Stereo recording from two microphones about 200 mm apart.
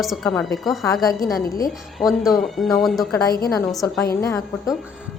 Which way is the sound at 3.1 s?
15° left (ahead or behind).